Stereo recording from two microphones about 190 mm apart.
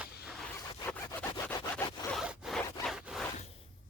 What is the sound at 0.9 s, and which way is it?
Sawing, 10° left (ahead or behind).